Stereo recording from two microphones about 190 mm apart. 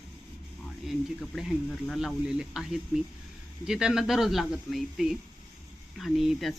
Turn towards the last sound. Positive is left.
turn(degrees=0)  # may be behind; listen again after turning